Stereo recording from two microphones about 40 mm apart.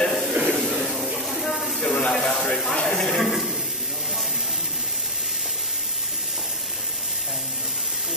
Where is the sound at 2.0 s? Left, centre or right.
Centre.